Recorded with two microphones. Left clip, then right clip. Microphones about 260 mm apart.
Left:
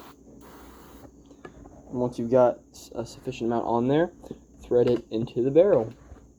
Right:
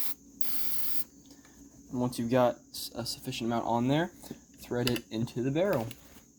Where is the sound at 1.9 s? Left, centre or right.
Right.